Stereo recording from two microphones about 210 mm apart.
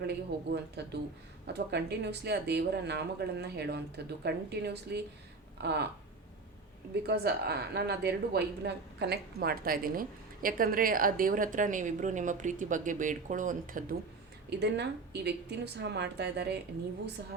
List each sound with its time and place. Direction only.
0.0 s speech: 50° right (ahead or behind)
5.5 s a sound: 55° right (ahead or behind)
6.9 s a woman's voice: 50° right (ahead or behind)
14.6 s speech: 55° right (ahead or behind)